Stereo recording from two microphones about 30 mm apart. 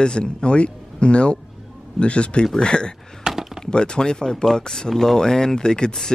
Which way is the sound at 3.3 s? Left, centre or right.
Right.